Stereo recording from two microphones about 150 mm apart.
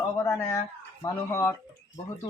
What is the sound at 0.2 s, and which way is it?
A man's voice, 20° left (ahead or behind).